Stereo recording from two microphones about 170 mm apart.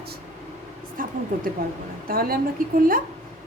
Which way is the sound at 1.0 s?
55° right (ahead or behind).